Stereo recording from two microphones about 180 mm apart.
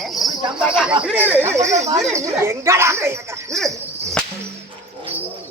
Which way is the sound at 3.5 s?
Centre (ahead or behind).